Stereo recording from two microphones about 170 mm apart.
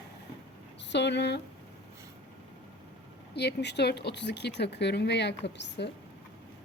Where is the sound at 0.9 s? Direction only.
90° left.